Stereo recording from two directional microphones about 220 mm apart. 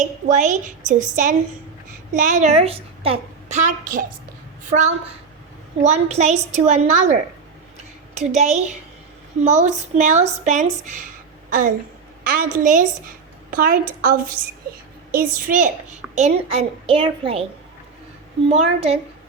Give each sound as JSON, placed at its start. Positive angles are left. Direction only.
{"t": 0.0, "sound": "a woman's voice", "side_deg": -35}
{"t": 5.8, "sound": "a woman's voice", "side_deg": -30}
{"t": 12.2, "sound": "a woman's voice", "side_deg": -40}
{"t": 18.4, "sound": "a woman's voice", "side_deg": -30}